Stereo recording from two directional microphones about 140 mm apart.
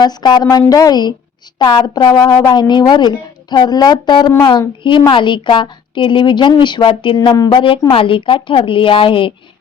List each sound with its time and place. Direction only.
0.0 s a woman's voice: 30° left (ahead or behind)
7.9 s a woman's voice: 40° left (ahead or behind)